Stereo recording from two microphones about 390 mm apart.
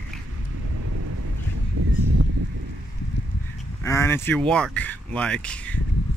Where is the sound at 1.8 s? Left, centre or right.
Right.